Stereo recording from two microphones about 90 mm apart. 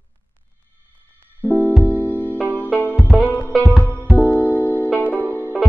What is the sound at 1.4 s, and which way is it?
Music, 20° left (ahead or behind).